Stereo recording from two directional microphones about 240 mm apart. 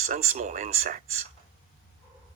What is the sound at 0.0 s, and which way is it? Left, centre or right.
Speech, right.